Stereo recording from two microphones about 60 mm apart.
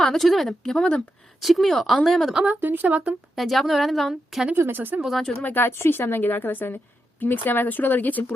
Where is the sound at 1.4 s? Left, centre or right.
Centre.